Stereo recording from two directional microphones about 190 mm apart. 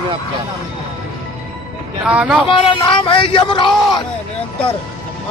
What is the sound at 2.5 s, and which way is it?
Speech, 25° left (ahead or behind).